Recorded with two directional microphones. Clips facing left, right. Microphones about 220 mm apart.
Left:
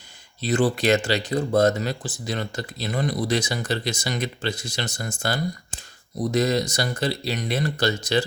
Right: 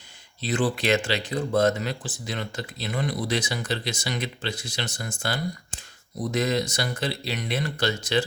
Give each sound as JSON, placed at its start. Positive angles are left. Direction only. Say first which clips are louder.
{"t": 0.4, "sound": "speech", "louder": "left 4 dB", "side_deg": 40}